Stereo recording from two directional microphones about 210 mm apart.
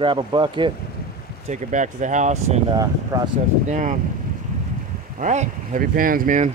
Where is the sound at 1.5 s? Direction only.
35° right (ahead or behind).